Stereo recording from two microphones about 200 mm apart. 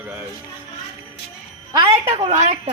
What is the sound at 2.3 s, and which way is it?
Speech, 35° right (ahead or behind).